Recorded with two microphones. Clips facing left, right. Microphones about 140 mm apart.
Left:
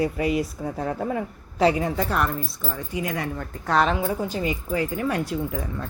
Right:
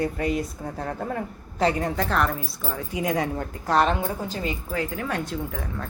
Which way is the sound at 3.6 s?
Centre (ahead or behind).